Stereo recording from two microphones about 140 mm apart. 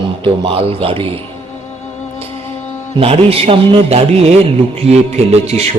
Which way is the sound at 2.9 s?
45° right (ahead or behind).